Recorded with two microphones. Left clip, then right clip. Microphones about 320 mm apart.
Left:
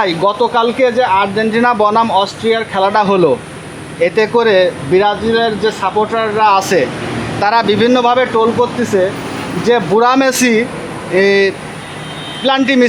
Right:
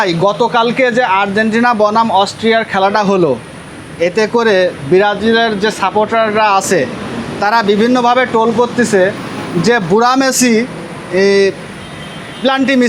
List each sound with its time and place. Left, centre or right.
0.0 s speech: right
9.6 s speech: centre